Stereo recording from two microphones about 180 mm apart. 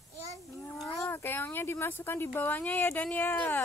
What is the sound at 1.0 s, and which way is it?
Speech, 10° left (ahead or behind).